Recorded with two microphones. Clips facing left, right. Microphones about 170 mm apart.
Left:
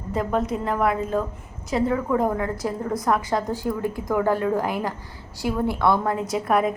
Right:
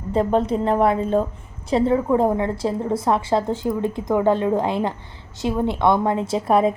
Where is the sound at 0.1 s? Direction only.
30° right (ahead or behind).